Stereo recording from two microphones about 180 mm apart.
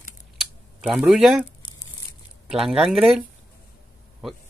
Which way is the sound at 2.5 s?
Centre (ahead or behind).